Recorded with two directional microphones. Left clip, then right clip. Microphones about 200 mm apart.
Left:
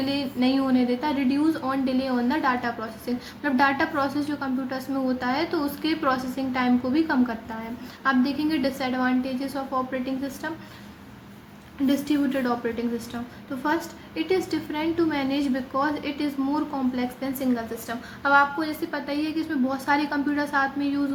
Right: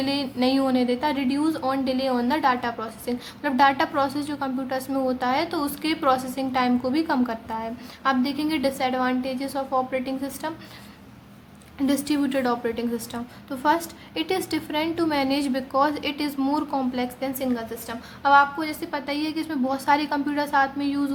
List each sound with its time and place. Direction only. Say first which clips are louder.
0.0 s a woman's voice: right 1 dB; 35° right (ahead or behind)
11.9 s a woman's voice: even; 35° right (ahead or behind)
14.2 s a woman's voice: left 1 dB; 35° right (ahead or behind)